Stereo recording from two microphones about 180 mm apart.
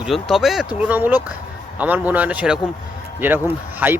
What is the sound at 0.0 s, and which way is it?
Speech, centre (ahead or behind).